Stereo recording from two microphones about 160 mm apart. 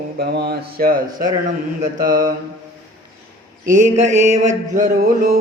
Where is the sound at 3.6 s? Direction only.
50° right (ahead or behind).